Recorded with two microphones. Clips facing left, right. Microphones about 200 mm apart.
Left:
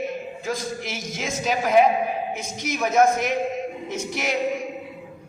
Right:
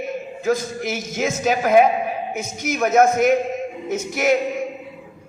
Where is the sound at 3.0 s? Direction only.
50° right (ahead or behind).